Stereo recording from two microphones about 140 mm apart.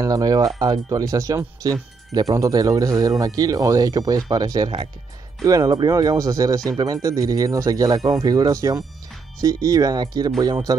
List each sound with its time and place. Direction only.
0.0 s speech: 25° right (ahead or behind)